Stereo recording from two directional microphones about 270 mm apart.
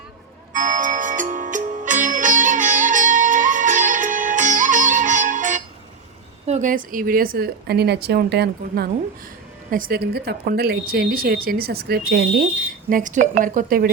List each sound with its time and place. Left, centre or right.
0.5 s music: right
6.5 s a woman's voice: right